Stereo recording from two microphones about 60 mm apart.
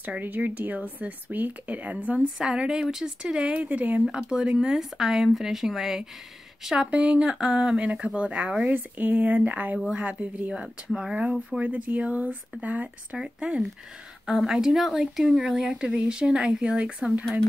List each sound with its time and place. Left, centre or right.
0.0 s speech: right
2.3 s speech: centre
3.6 s speech: right
4.2 s speech: centre
6.9 s speech: centre
11.6 s speech: right
13.2 s speech: centre